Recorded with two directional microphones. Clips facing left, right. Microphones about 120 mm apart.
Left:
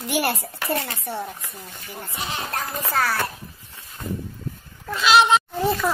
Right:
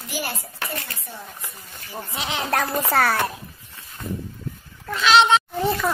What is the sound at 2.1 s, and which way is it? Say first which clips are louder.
Speech: right 5 dB; 75° right (ahead or behind).